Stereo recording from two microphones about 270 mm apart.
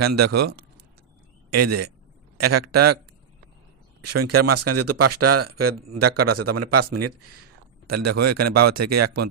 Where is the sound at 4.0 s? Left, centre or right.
Right.